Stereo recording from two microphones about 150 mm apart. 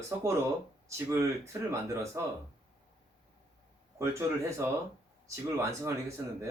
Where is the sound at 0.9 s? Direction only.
20° right (ahead or behind).